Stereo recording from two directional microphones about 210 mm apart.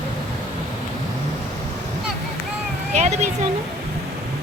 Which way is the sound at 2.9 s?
35° right (ahead or behind).